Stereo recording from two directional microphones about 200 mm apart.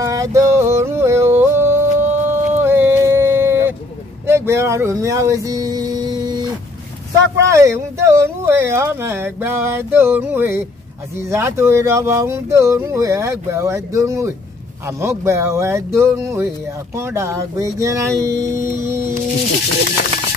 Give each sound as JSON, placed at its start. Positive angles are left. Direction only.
{"t": 0.0, "sound": "a sound", "side_deg": -15}
{"t": 4.3, "sound": "speech", "side_deg": -15}
{"t": 7.4, "sound": "speech", "side_deg": -15}